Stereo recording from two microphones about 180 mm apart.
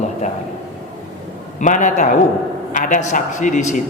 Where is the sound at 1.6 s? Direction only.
45° left (ahead or behind).